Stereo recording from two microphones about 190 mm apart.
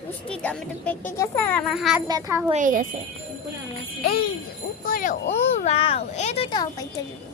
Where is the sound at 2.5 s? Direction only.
45° right (ahead or behind).